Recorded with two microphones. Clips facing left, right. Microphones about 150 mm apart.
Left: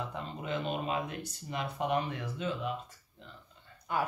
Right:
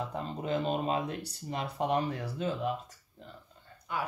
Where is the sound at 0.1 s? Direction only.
35° right (ahead or behind).